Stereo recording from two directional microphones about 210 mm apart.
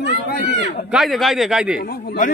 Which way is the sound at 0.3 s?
45° left (ahead or behind).